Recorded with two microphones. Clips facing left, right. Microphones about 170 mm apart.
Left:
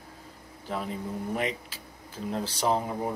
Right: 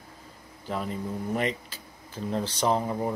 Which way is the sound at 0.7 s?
Centre (ahead or behind).